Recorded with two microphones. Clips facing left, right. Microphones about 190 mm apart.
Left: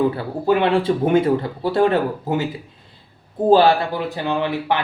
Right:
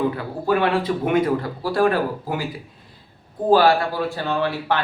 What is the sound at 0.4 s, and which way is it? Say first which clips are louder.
Speech: left 3 dB; 20° left (ahead or behind).